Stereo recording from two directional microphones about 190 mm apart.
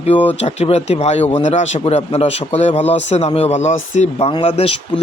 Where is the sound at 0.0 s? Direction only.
30° left (ahead or behind).